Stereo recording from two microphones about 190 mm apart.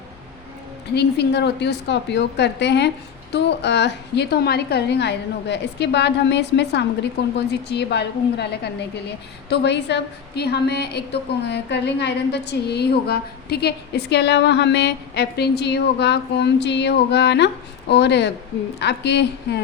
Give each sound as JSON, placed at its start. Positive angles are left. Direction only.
{"t": 0.9, "sound": "a woman's voice", "side_deg": 60}